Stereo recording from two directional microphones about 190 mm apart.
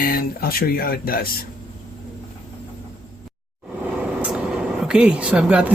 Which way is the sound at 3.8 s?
5° right (ahead or behind).